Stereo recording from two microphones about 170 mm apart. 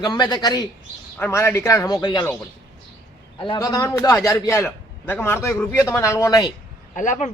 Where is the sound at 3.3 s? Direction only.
30° left (ahead or behind).